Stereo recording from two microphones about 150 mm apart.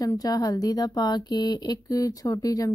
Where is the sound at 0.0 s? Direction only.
25° left (ahead or behind).